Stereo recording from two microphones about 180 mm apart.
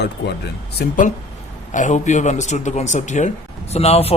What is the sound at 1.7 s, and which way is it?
A man's voice, 45° left (ahead or behind).